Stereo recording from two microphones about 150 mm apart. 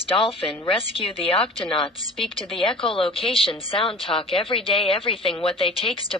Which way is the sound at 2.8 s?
35° left (ahead or behind).